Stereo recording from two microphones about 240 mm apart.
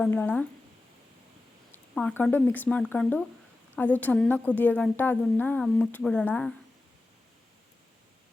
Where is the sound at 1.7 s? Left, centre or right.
Centre.